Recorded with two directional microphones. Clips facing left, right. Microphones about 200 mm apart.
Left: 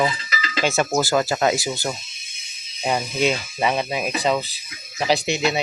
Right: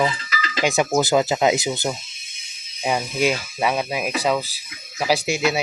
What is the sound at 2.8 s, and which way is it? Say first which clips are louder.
Speech: even; 5° right (ahead or behind).